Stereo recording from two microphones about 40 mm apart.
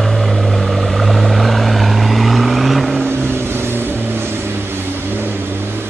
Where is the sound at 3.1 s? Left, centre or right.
Right.